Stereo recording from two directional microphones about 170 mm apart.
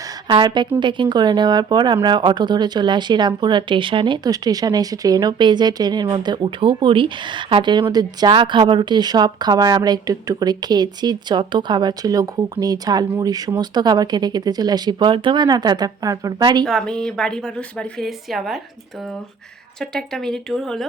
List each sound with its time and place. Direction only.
0.3 s speech: 30° right (ahead or behind)
16.6 s a woman's voice: 5° left (ahead or behind)
19.8 s a woman's voice: 5° left (ahead or behind)